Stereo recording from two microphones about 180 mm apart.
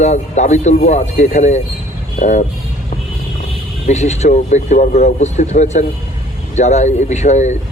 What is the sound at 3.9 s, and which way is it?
Speech, 40° left (ahead or behind).